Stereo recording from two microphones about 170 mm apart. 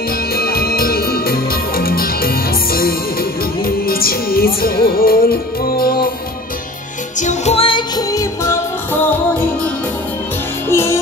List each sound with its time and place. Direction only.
0.3 s music: 65° left (ahead or behind)
7.2 s music: 40° left (ahead or behind); by 8.5 s 20° left (ahead or behind)
10.7 s music: 15° left (ahead or behind)